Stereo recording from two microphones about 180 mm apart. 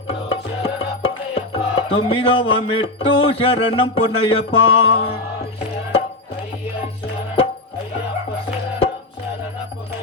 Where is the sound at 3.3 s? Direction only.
35° left (ahead or behind).